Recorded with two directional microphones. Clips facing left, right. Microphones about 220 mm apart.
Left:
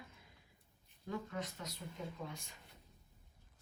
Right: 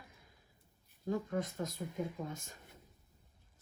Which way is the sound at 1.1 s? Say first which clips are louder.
Right 6 dB; 50° right (ahead or behind).